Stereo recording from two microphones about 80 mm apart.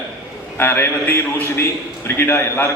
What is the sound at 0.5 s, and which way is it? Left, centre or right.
A man's voice, left.